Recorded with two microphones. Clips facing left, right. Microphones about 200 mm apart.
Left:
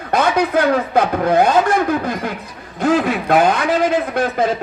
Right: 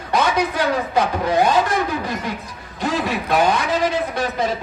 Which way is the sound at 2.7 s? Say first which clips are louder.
Left 6 dB; 50° left (ahead or behind).